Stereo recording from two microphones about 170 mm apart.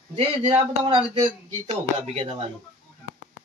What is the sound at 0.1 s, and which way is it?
Speech, 30° right (ahead or behind).